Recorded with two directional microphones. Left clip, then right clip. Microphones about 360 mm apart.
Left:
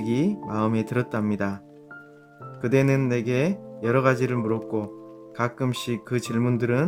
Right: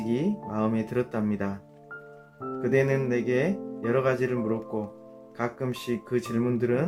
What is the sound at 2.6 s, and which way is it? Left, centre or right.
Speech, left.